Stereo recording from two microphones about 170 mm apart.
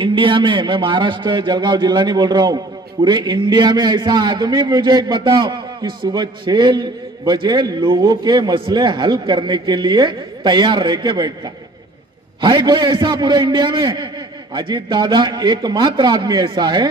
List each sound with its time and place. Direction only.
0.0 s a man's voice: 30° right (ahead or behind)